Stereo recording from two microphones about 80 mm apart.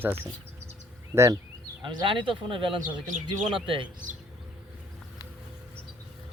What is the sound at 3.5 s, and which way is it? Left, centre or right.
Speech, right.